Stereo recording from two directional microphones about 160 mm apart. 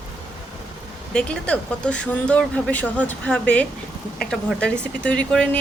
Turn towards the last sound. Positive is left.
turn(degrees=5)  # may be behind; listen again after turning